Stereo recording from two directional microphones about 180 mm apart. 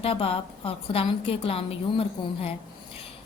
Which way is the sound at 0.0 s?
30° left (ahead or behind).